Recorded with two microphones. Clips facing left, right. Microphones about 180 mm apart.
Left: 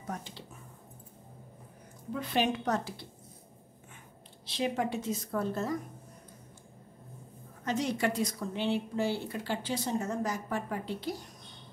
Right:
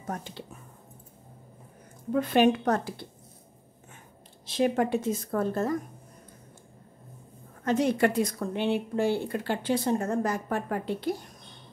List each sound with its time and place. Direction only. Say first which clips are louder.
0.0 s speech: right 4 dB; 50° right (ahead or behind)
2.1 s a woman's voice: right 8 dB; 55° right (ahead or behind)
4.5 s a woman's voice: right 7 dB; 50° right (ahead or behind)
7.6 s speech: right 6 dB; 55° right (ahead or behind)